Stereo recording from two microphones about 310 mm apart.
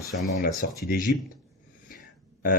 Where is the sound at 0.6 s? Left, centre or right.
Left.